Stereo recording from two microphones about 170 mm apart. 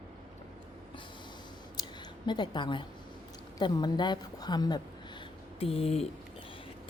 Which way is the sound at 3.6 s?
25° left (ahead or behind).